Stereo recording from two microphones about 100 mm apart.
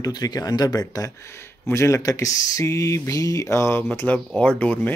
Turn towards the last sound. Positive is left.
turn(degrees=15)  # may be behind; listen again after turning